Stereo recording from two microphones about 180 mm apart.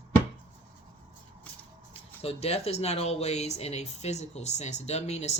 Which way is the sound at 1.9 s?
35° left (ahead or behind).